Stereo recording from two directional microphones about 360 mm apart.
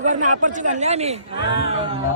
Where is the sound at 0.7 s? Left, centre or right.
Centre.